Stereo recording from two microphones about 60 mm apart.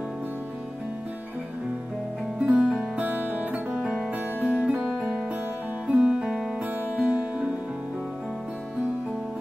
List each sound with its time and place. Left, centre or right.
2.3 s music: centre
4.8 s music: centre